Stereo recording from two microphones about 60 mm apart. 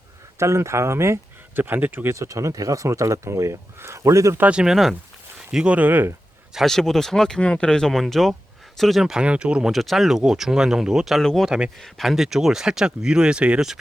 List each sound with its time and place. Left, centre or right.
0.3 s speech: right
1.5 s speech: right
2.1 s speech: right
4.5 s speech: centre; by 6.1 s right
6.7 s speech: centre
9.2 s speech: centre
9.7 s speech: centre
11.4 s speech: centre
11.8 s speech: centre